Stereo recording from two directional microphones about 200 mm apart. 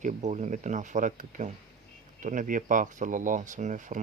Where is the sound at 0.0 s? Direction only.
35° right (ahead or behind).